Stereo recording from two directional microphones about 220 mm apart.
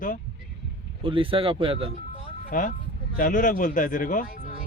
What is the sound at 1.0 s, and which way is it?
Speech, 25° right (ahead or behind).